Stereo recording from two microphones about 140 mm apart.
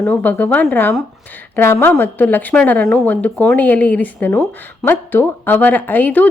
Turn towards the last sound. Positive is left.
turn(degrees=10)  # may be behind; listen again after turning